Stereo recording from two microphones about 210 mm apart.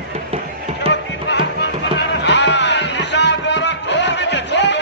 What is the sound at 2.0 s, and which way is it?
Music, 55° left (ahead or behind).